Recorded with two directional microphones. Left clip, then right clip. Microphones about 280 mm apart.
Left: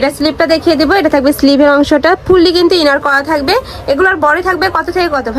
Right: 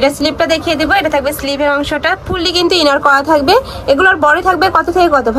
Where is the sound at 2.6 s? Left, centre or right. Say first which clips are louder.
Left 1 dB; centre.